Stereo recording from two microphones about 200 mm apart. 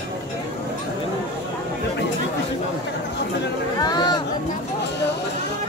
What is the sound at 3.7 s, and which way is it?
Chatter, 20° left (ahead or behind).